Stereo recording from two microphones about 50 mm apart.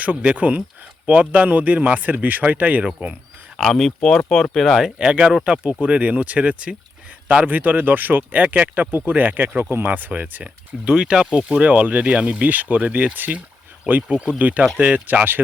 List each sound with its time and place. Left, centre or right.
0.0 s speech: right
3.6 s speech: centre
4.9 s speech: centre
10.8 s speech: centre; by 15.4 s right